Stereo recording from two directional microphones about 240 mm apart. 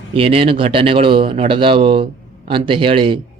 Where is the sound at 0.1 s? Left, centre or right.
Right.